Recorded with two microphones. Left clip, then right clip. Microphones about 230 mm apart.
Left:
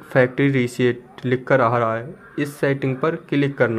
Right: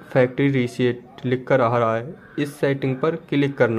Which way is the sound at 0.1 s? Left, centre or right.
Centre.